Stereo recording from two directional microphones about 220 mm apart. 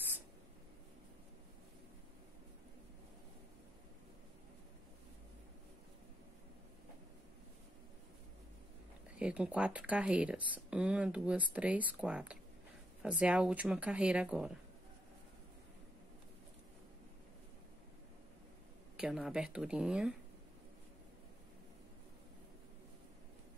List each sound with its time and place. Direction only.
9.2 s speech: 5° right (ahead or behind)
18.9 s speech: 5° right (ahead or behind)